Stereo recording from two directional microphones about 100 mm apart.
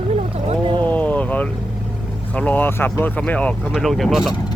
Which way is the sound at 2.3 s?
15° left (ahead or behind).